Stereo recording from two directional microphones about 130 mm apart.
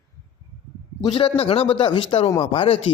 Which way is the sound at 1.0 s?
45° left (ahead or behind).